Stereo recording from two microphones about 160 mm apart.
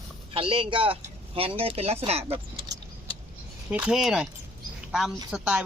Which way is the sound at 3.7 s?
5° right (ahead or behind).